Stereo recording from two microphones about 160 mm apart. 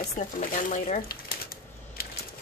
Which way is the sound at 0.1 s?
45° left (ahead or behind).